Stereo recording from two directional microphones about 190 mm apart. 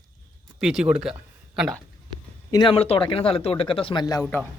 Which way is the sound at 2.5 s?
25° left (ahead or behind).